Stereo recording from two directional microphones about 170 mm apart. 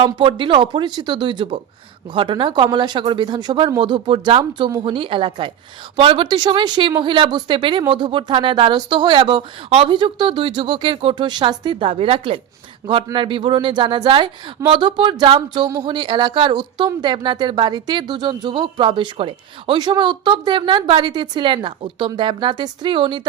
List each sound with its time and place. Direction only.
0.0 s speech: 30° right (ahead or behind)